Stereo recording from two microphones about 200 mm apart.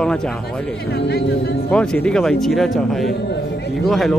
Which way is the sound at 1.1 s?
55° left (ahead or behind).